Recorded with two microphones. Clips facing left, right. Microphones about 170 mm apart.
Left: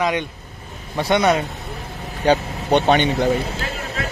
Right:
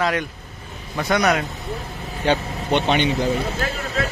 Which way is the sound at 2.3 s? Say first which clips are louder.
Left 4 dB; 45° left (ahead or behind).